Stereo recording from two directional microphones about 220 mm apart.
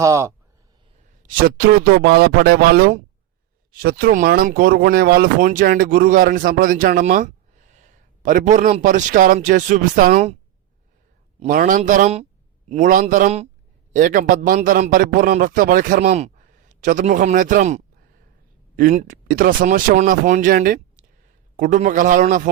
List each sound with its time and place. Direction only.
0.0 s speech: 15° right (ahead or behind)
1.3 s speech: 40° right (ahead or behind)
11.3 s speech: 40° right (ahead or behind)